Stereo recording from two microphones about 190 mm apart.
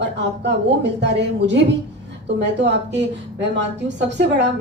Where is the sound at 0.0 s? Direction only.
65° right (ahead or behind).